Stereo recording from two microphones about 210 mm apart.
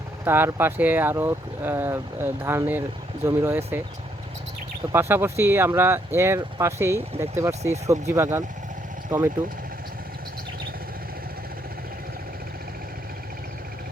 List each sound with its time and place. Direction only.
0.3 s speech: 10° right (ahead or behind)
4.9 s speech: 10° right (ahead or behind)